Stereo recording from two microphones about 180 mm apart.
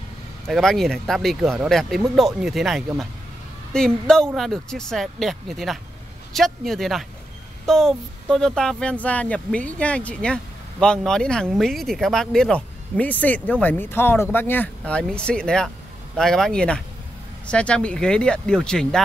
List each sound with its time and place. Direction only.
0.5 s speech: centre (ahead or behind)